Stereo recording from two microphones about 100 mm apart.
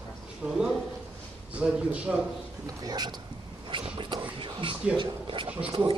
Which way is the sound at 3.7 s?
55° right (ahead or behind).